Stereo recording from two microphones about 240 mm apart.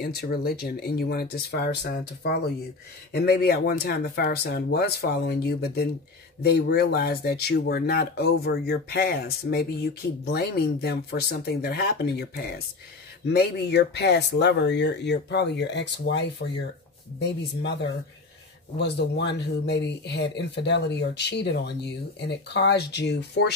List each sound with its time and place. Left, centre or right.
0.0 s speech: left
18.8 s speech: left